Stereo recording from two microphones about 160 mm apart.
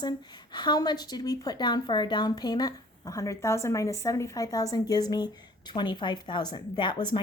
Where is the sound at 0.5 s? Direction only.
25° left (ahead or behind).